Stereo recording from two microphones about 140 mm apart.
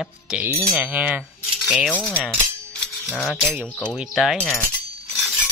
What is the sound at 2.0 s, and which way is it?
Speech, centre (ahead or behind).